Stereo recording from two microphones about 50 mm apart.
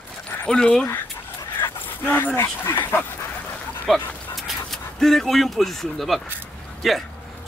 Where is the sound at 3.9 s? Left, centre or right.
Centre.